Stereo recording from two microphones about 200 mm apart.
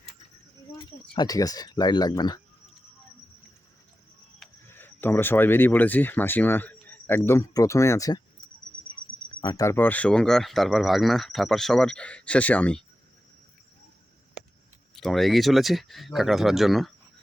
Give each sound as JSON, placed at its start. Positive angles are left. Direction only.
{"t": 1.1, "sound": "speech", "side_deg": 20}
{"t": 4.7, "sound": "speech", "side_deg": 10}
{"t": 9.4, "sound": "speech", "side_deg": 20}
{"t": 14.9, "sound": "speech", "side_deg": 0}